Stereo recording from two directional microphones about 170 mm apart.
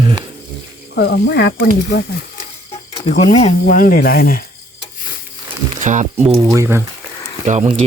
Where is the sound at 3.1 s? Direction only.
40° left (ahead or behind); by 4.5 s 60° left (ahead or behind).